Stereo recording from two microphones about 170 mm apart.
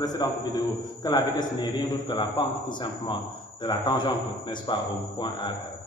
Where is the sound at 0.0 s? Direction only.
25° left (ahead or behind).